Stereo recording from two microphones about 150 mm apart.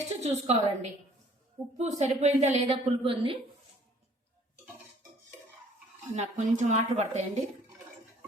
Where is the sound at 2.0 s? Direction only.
50° right (ahead or behind).